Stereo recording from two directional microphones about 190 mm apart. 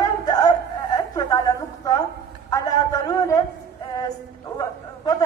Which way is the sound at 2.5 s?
20° left (ahead or behind).